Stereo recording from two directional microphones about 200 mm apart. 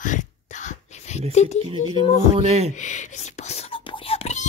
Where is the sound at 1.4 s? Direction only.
35° left (ahead or behind).